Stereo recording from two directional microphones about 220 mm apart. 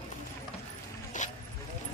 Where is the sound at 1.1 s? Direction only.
35° left (ahead or behind).